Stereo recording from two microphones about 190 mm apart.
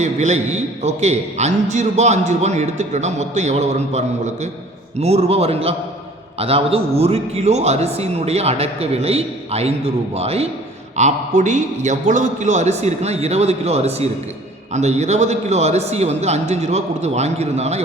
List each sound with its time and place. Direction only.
0.0 s a man's voice: 35° right (ahead or behind)